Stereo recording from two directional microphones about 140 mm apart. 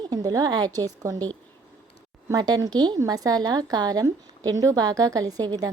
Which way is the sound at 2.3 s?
25° right (ahead or behind).